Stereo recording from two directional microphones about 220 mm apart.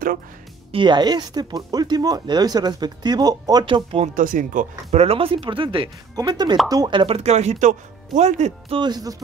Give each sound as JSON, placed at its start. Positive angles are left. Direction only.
{"t": 0.7, "sound": "speech", "side_deg": -20}
{"t": 4.1, "sound": "speech", "side_deg": -35}